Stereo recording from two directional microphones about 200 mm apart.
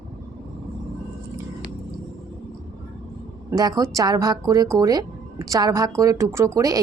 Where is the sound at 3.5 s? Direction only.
20° right (ahead or behind).